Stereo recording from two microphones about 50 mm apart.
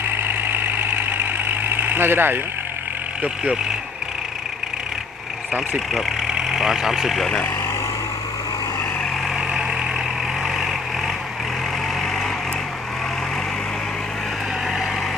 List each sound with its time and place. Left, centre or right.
0.0 s vehicle: right
6.3 s speech: centre
7.2 s speech: centre